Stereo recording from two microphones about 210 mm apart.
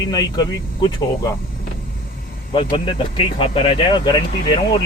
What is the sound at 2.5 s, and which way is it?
Speech, 25° left (ahead or behind).